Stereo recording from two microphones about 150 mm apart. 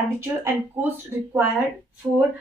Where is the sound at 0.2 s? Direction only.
15° right (ahead or behind).